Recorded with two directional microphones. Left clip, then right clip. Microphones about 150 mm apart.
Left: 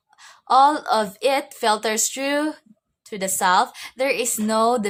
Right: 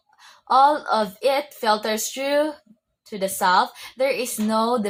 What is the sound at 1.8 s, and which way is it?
A woman's voice, 25° left (ahead or behind).